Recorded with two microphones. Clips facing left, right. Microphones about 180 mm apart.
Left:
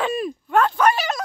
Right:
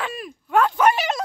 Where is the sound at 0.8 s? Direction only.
20° right (ahead or behind).